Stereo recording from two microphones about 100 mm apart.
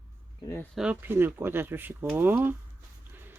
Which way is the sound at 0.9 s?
20° right (ahead or behind).